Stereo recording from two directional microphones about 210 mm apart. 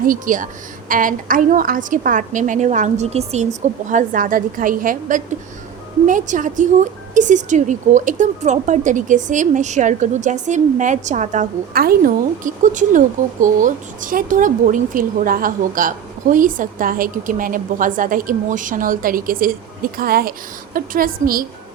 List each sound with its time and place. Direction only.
0.0 s a woman's voice: 40° right (ahead or behind)